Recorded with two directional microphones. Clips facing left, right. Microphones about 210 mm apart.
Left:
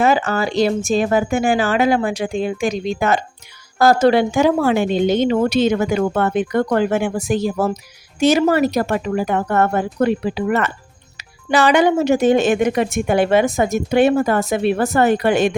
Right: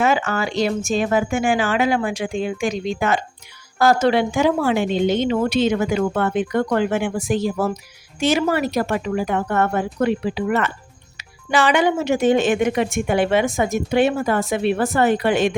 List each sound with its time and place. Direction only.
0.0 s a woman's voice: 35° left (ahead or behind)